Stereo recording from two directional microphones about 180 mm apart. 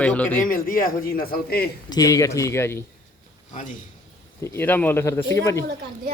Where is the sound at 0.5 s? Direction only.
50° left (ahead or behind).